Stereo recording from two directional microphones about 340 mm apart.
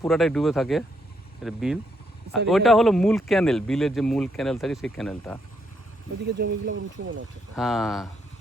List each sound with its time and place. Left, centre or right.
0.0 s speech: centre
6.2 s speech: right
7.5 s speech: centre